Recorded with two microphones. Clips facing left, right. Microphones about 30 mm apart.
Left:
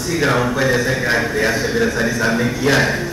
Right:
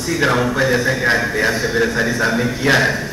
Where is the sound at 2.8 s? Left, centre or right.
Centre.